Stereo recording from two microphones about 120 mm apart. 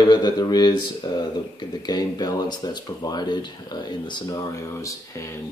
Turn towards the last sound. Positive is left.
turn(degrees=25)  # may be behind; listen again after turning